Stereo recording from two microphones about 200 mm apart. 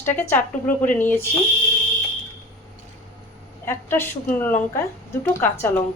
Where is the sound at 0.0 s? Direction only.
10° left (ahead or behind).